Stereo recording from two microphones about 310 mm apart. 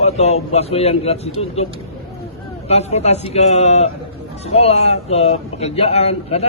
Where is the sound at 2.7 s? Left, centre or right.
Left.